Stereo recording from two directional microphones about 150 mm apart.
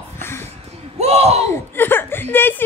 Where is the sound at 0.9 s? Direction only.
45° right (ahead or behind).